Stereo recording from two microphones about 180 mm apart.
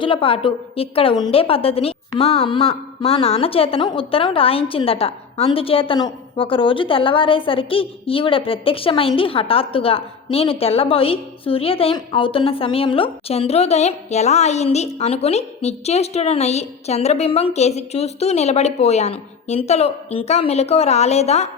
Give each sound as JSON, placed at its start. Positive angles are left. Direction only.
{"t": 0.0, "sound": "a woman's voice", "side_deg": 30}